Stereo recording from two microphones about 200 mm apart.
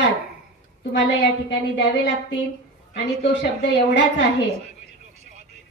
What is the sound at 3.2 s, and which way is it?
Speech, 60° left (ahead or behind).